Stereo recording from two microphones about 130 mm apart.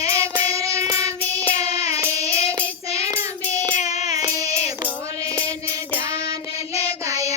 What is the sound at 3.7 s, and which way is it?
Music, 60° left (ahead or behind).